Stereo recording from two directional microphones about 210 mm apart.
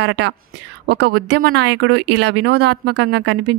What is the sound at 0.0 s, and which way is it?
Speech, 55° right (ahead or behind).